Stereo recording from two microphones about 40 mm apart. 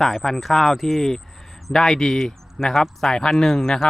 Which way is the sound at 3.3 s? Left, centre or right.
Centre.